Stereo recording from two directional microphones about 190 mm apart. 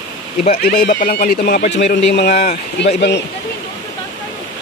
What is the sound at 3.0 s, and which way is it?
Speech, 65° left (ahead or behind).